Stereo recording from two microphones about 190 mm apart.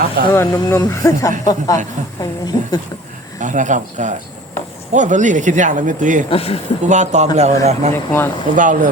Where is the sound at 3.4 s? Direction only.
40° right (ahead or behind).